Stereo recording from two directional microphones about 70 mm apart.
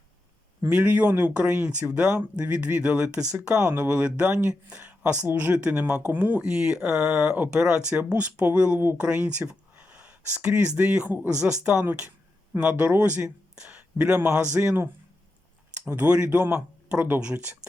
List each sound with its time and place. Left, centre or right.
0.7 s speech: right
1.9 s speech: centre; by 5.5 s right
5.5 s speech: right
6.4 s speech: centre
11.3 s speech: centre
14.2 s speech: right
15.8 s speech: right
16.0 s speech: centre